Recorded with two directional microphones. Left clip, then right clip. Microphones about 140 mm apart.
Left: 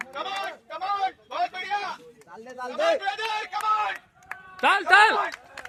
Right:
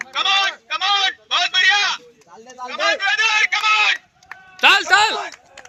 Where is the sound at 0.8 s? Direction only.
40° right (ahead or behind).